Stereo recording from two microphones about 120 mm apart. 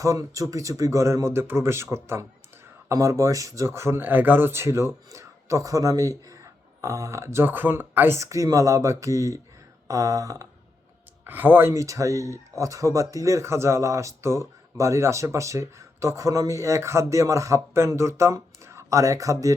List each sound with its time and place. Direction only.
0.0 s speech: 30° right (ahead or behind)
11.3 s speech: 15° right (ahead or behind)